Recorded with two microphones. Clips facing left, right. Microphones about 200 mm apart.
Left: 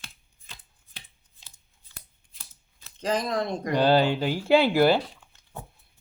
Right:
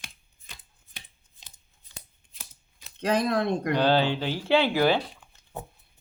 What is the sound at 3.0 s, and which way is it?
Speech, 60° right (ahead or behind).